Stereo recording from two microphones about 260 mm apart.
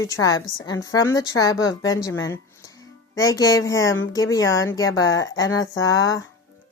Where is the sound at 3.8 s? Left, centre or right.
Left.